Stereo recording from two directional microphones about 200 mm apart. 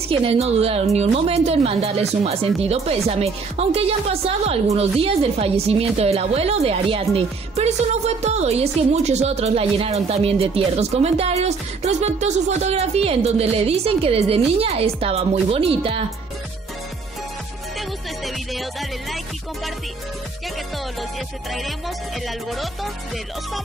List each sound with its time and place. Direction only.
0.1 s speech: 30° right (ahead or behind)
17.7 s music: centre (ahead or behind)
21.5 s music: centre (ahead or behind)